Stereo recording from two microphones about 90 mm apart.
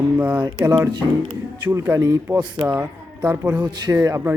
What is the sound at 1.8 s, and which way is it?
Speech, 20° right (ahead or behind).